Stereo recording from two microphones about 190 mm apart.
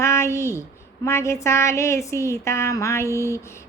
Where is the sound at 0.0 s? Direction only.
15° left (ahead or behind).